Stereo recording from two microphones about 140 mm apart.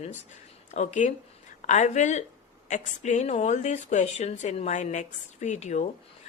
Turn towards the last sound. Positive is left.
turn(degrees=55)  # may be behind; listen again after turning